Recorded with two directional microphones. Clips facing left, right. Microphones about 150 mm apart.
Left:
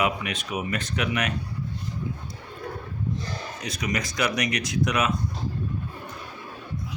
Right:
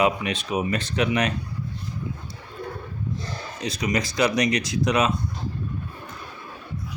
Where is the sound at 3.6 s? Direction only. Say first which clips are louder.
Right 4 dB; 30° right (ahead or behind).